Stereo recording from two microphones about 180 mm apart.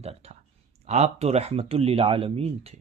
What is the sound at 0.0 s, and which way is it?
Clicking, 35° right (ahead or behind).